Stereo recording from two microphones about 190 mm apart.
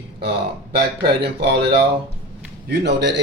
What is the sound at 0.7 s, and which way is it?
Speech, 55° right (ahead or behind).